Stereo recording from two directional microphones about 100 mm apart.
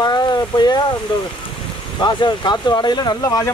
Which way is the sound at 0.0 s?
45° left (ahead or behind).